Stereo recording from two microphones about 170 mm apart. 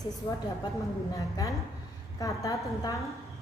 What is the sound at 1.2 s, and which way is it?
A woman's voice, 20° left (ahead or behind).